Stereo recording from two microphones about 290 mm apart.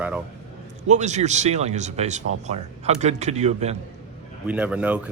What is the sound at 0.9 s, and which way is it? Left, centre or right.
Speech, right.